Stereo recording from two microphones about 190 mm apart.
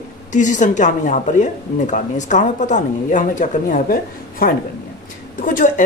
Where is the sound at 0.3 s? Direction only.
40° left (ahead or behind).